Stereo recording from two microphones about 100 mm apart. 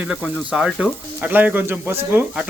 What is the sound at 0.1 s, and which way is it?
Speech, 10° right (ahead or behind).